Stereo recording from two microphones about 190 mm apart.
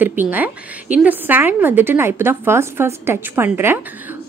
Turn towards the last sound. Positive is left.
turn(degrees=-10)  # may be behind; listen again after turning